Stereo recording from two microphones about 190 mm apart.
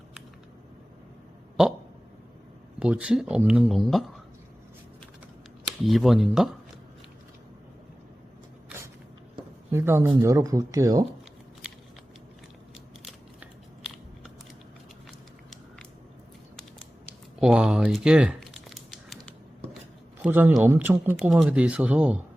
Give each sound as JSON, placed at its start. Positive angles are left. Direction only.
{"t": 2.7, "sound": "speech", "side_deg": -5}
{"t": 5.8, "sound": "speech", "side_deg": 0}
{"t": 9.7, "sound": "speech", "side_deg": -15}
{"t": 13.1, "sound": "scissors", "side_deg": 0}
{"t": 17.4, "sound": "crumpling", "side_deg": -5}
{"t": 20.2, "sound": "speech", "side_deg": -10}